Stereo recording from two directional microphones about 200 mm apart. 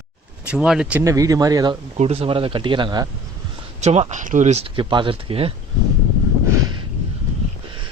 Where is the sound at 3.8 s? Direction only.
35° right (ahead or behind).